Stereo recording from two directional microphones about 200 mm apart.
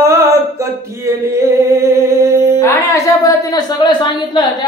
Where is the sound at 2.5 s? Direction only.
15° left (ahead or behind).